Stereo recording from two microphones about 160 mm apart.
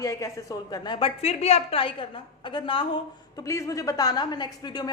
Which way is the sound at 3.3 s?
20° left (ahead or behind).